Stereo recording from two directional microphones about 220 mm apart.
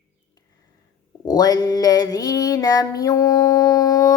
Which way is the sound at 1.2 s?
15° left (ahead or behind).